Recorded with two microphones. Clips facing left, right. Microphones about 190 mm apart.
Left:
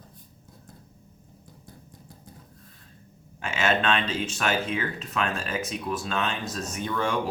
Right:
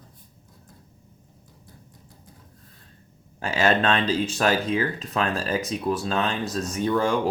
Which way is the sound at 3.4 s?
35° right (ahead or behind).